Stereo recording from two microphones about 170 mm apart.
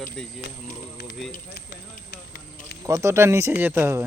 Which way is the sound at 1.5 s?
70° left (ahead or behind).